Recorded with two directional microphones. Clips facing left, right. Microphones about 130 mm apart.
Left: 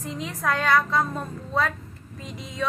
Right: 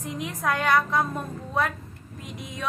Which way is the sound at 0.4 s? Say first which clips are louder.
Left 1 dB; 15° right (ahead or behind).